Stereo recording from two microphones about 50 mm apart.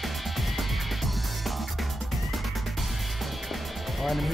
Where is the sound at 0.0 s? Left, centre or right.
Centre.